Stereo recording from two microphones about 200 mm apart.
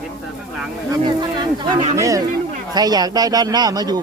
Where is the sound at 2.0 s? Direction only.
15° right (ahead or behind).